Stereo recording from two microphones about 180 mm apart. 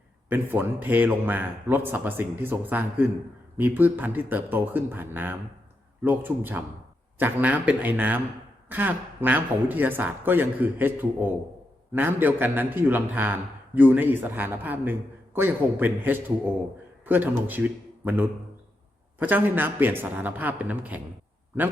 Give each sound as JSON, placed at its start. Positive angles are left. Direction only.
{"t": 0.3, "sound": "a man's voice", "side_deg": -10}